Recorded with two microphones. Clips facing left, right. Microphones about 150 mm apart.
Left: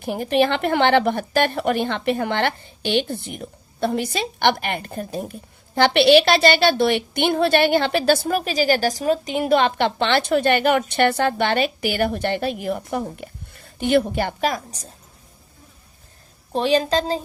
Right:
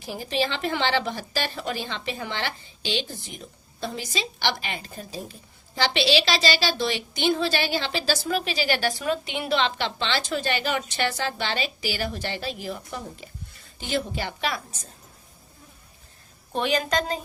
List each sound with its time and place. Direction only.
0.0 s a woman's voice: 60° left (ahead or behind); by 14.8 s 40° left (ahead or behind)
16.5 s a woman's voice: 30° left (ahead or behind)